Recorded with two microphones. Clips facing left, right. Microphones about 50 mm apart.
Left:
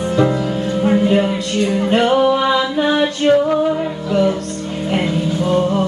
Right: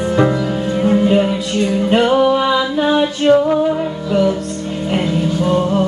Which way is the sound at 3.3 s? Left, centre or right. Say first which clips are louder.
Right 2 dB; centre.